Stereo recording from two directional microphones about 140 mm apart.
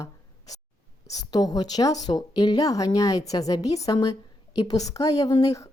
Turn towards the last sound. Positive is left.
turn(degrees=25)  # may be behind; listen again after turning